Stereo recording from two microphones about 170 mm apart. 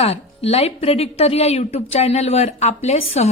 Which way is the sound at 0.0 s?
35° left (ahead or behind).